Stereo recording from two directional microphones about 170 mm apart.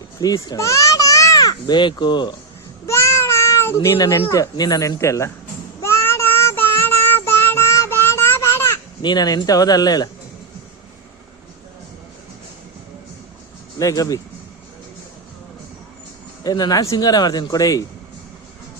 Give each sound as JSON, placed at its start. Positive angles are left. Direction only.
{"t": 0.2, "sound": "a child's voice", "side_deg": 20}
{"t": 2.8, "sound": "meow", "side_deg": 15}
{"t": 3.8, "sound": "speech", "side_deg": 25}
{"t": 5.8, "sound": "child singing", "side_deg": 15}
{"t": 9.0, "sound": "speech", "side_deg": 25}
{"t": 13.7, "sound": "speech", "side_deg": 20}
{"t": 16.4, "sound": "speech", "side_deg": 20}